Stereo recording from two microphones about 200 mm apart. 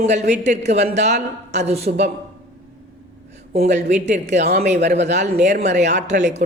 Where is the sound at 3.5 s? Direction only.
35° right (ahead or behind).